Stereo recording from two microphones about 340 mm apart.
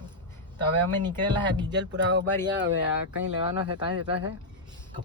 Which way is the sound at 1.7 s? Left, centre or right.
Right.